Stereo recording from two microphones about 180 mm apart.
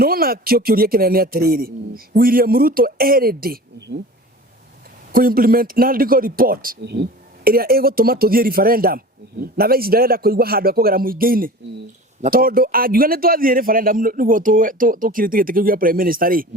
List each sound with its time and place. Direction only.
0.0 s a man's voice: 55° right (ahead or behind)
5.1 s a man's voice: 55° right (ahead or behind)